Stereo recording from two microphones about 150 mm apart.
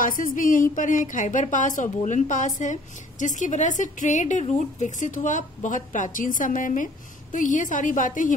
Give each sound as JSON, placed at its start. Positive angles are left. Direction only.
{"t": 0.0, "sound": "a woman's voice", "side_deg": 65}